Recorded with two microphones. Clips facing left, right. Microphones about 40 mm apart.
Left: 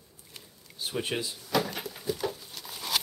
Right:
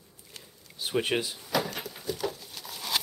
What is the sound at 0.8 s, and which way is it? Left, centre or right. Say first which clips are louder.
Speech: right 4 dB; right.